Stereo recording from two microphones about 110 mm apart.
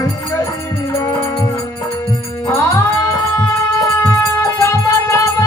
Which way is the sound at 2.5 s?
25° left (ahead or behind).